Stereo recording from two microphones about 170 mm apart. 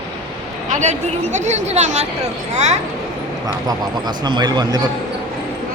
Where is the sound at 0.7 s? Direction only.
45° right (ahead or behind).